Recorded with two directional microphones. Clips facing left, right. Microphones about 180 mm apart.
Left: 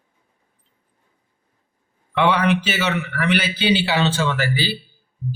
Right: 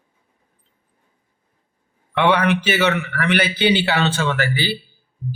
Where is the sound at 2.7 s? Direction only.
55° right (ahead or behind).